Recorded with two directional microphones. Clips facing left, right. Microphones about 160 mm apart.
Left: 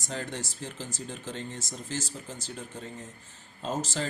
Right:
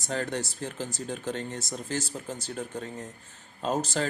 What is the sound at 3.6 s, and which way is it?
Speech, 60° right (ahead or behind).